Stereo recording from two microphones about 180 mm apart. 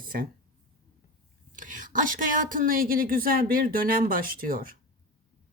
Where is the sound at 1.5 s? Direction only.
45° right (ahead or behind).